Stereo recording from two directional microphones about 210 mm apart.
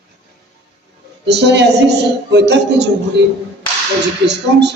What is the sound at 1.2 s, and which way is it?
A woman's voice, 55° right (ahead or behind).